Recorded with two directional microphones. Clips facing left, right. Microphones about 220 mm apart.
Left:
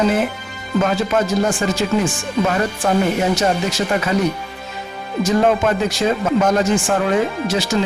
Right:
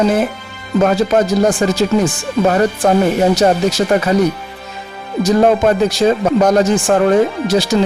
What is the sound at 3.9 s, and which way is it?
Speech, 40° right (ahead or behind).